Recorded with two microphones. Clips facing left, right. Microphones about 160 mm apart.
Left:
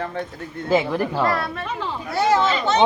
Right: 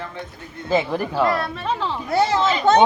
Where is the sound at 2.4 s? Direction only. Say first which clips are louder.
Right 4 dB; 50° right (ahead or behind).